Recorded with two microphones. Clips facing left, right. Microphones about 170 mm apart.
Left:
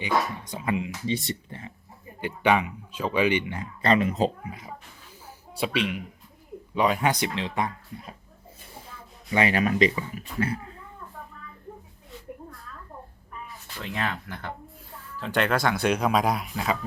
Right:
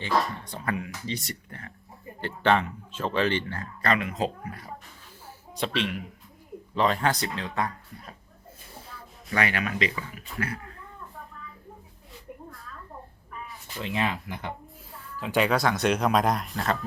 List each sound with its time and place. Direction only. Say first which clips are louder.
0.1 s speech: even; centre (ahead or behind)
0.4 s speech: left 3 dB; 20° left (ahead or behind)
2.2 s speech: left 1 dB; 10° left (ahead or behind)
2.9 s speech: left 1 dB; centre (ahead or behind)
3.2 s speech: left 3 dB; 10° left (ahead or behind)
4.4 s speech: even; centre (ahead or behind)
7.3 s speech: left 2 dB; 20° left (ahead or behind)
9.3 s speech: left 5 dB; 30° left (ahead or behind)
10.3 s speech: left 5 dB; 25° left (ahead or behind)
13.7 s speech: right 2 dB; 20° right (ahead or behind)
15.2 s speech: right 1 dB; centre (ahead or behind)